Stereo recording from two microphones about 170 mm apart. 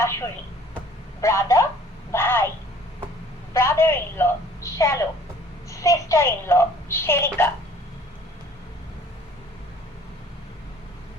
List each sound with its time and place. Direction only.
0.0 s a woman's voice: 15° left (ahead or behind)
3.5 s a woman's voice: 15° left (ahead or behind)